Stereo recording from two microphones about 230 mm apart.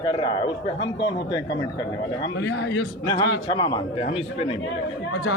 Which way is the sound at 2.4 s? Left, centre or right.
Left.